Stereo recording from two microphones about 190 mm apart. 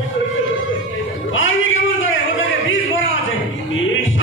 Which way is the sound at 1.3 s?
90° left.